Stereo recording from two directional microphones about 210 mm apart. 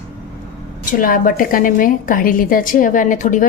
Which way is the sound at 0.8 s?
40° left (ahead or behind).